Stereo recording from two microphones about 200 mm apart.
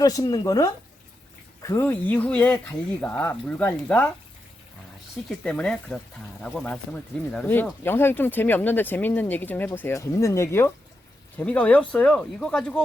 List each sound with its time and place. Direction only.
0.0 s speech: 20° left (ahead or behind)
5.4 s speech: 5° left (ahead or behind)